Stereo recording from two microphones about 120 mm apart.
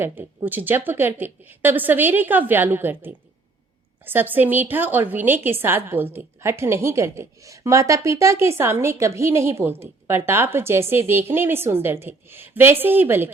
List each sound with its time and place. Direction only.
0.0 s a woman's voice: 20° right (ahead or behind)